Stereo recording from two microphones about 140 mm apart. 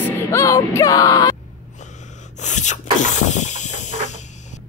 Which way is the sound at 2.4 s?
60° left (ahead or behind).